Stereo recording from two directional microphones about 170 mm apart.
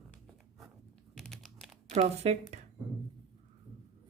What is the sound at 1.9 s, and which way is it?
Speech, 40° right (ahead or behind).